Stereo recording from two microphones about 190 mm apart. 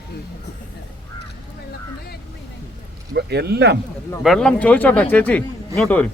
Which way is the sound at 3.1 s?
60° right (ahead or behind).